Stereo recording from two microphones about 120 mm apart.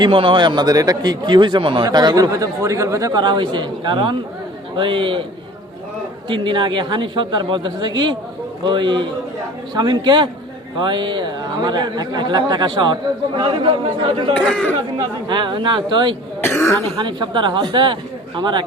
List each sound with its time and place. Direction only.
0.0 s a man's voice: 45° right (ahead or behind)
6.2 s speech: 45° right (ahead or behind)
14.3 s speech: 10° left (ahead or behind)
14.9 s speech: 40° right (ahead or behind)
16.4 s speech: 20° left (ahead or behind)
16.9 s speech: 40° right (ahead or behind)